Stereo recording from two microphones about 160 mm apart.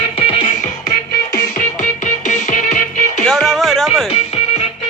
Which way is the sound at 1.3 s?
55° left (ahead or behind).